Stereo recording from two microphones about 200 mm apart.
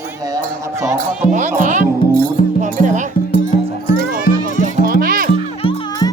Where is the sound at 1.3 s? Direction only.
40° right (ahead or behind).